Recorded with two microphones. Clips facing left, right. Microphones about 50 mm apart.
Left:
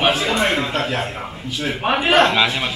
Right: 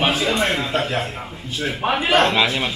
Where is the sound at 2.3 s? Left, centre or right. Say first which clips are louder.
Left 1 dB; centre.